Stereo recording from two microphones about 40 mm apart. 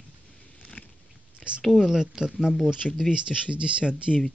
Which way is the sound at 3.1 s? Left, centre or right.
Right.